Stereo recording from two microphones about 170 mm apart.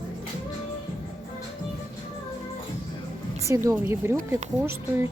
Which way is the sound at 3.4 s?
15° right (ahead or behind).